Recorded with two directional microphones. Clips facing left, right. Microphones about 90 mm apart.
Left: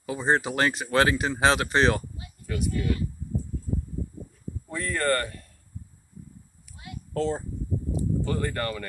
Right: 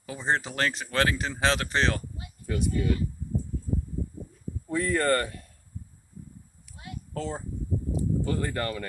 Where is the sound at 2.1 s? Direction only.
25° right (ahead or behind).